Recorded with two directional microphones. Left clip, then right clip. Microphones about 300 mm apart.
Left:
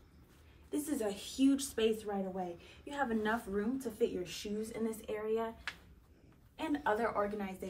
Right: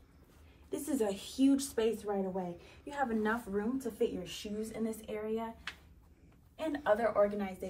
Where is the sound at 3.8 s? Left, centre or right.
Centre.